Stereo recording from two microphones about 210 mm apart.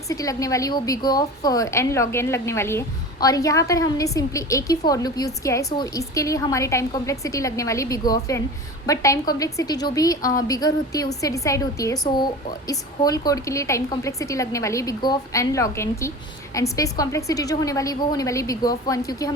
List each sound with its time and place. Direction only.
0.1 s a woman's voice: 15° left (ahead or behind)